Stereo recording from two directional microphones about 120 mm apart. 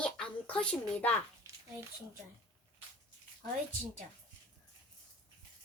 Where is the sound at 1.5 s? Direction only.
25° right (ahead or behind).